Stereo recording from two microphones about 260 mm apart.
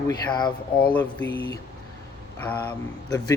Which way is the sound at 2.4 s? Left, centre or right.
Centre.